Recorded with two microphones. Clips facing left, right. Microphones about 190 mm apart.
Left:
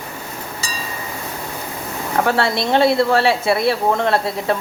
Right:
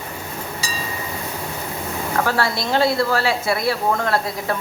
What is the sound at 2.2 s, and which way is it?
Speech, 25° left (ahead or behind).